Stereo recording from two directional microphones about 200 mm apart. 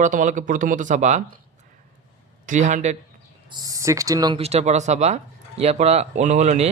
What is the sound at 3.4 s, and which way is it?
Speech, 20° right (ahead or behind).